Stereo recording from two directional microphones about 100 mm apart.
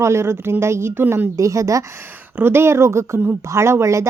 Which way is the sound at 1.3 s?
30° right (ahead or behind).